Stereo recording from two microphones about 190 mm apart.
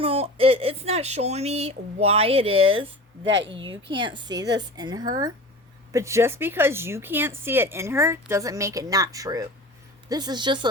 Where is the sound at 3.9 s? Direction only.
25° right (ahead or behind).